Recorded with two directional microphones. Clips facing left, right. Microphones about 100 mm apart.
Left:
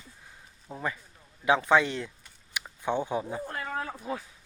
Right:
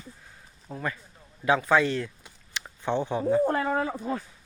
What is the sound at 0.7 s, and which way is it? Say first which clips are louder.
Speech: right 1 dB; 15° left (ahead or behind).